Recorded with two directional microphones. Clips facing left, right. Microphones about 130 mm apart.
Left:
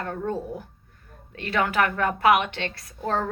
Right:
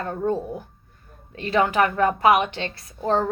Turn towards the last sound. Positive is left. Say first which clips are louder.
# right 4 dB
turn(degrees=-25)  # may be behind; listen again after turning